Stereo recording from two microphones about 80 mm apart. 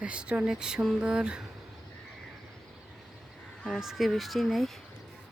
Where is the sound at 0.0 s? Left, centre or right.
Centre.